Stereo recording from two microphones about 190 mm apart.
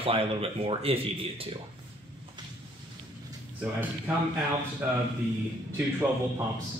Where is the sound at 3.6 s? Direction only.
10° right (ahead or behind).